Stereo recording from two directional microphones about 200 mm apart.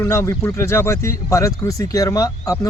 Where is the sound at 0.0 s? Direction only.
15° left (ahead or behind).